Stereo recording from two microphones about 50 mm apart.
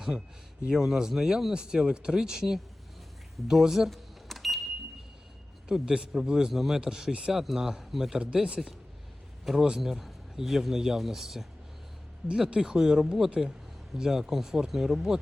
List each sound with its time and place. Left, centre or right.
0.7 s speech: centre
3.3 s power windows: centre
5.6 s speech: centre
7.3 s speech: centre
8.2 s speech: right
9.9 s speech: centre
12.3 s speech: centre